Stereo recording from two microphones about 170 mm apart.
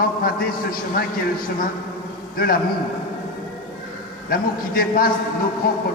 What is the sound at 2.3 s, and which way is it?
Speech, 60° left (ahead or behind).